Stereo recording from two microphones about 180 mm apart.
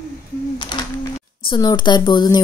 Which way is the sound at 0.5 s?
25° left (ahead or behind).